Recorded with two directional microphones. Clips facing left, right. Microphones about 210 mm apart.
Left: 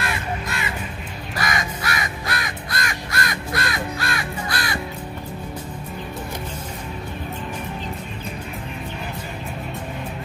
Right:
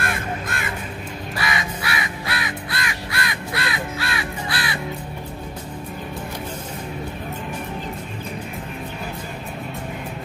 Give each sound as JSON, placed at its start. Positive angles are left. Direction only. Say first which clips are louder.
{"t": 0.0, "sound": "crow", "louder": "even", "side_deg": -50}
{"t": 1.3, "sound": "crow", "louder": "left 1 dB", "side_deg": 45}